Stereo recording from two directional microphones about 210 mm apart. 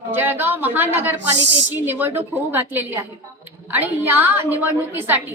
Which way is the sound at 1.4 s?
60° right (ahead or behind).